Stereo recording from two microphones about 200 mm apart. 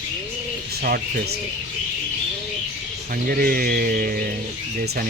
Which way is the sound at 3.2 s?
45° right (ahead or behind).